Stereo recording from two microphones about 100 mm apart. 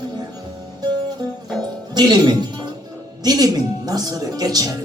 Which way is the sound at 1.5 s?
45° right (ahead or behind).